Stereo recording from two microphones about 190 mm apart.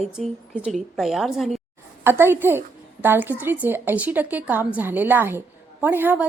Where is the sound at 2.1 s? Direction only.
10° right (ahead or behind).